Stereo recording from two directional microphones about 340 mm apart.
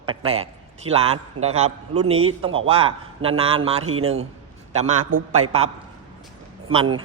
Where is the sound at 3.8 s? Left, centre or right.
Right.